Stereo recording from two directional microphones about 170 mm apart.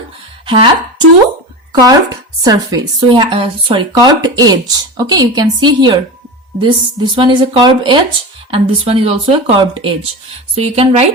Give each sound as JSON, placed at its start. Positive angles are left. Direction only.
{"t": 0.4, "sound": "speech", "side_deg": -25}